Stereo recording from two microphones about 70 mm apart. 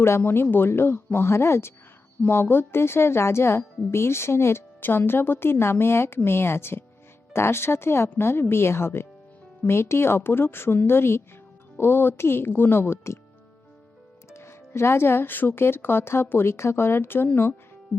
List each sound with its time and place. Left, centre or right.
0.0 s speech: left
14.3 s speech: left